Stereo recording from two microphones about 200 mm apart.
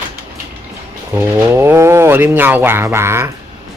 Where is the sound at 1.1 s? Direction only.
10° right (ahead or behind).